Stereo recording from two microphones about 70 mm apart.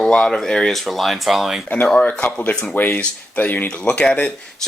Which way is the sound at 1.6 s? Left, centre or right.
Left.